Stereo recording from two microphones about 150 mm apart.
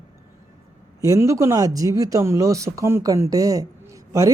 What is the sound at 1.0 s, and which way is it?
Speech, 20° right (ahead or behind).